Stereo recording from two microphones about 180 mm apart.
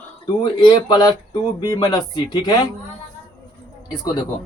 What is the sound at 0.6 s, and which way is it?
Speech, 25° left (ahead or behind).